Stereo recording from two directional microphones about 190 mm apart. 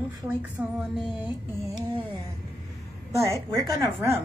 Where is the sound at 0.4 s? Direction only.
10° right (ahead or behind).